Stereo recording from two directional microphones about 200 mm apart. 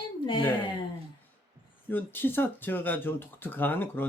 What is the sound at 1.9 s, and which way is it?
Speech, 10° left (ahead or behind).